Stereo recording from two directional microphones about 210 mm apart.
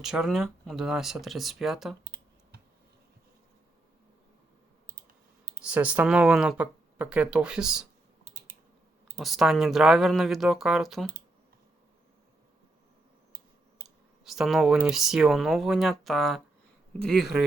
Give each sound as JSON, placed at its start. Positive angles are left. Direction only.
{"t": 0.0, "sound": "speech", "side_deg": 0}
{"t": 2.0, "sound": "computer keyboard", "side_deg": -55}
{"t": 5.6, "sound": "speech", "side_deg": -5}
{"t": 8.2, "sound": "typing", "side_deg": -35}
{"t": 9.1, "sound": "speech", "side_deg": 0}
{"t": 13.8, "sound": "speech", "side_deg": 0}